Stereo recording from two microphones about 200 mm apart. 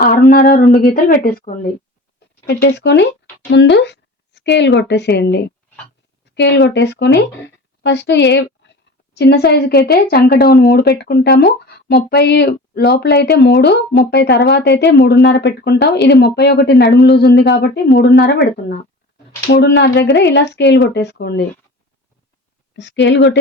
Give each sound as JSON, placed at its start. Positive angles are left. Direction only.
{"t": 0.0, "sound": "speech", "side_deg": 45}
{"t": 2.5, "sound": "a woman's voice", "side_deg": 55}
{"t": 19.5, "sound": "speech", "side_deg": 55}
{"t": 22.7, "sound": "speech", "side_deg": 65}